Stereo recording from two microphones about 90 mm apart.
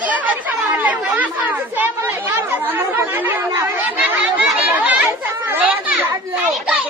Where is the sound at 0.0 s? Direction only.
15° right (ahead or behind).